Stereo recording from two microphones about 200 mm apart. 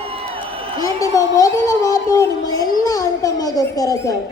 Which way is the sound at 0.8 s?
15° left (ahead or behind).